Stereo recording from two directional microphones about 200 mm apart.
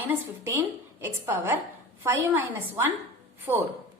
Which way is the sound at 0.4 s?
10° right (ahead or behind).